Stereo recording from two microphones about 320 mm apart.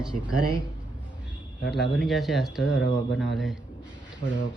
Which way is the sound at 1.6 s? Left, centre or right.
Left.